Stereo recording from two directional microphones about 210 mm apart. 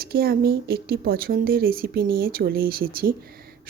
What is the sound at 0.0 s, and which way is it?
Speech, 45° right (ahead or behind).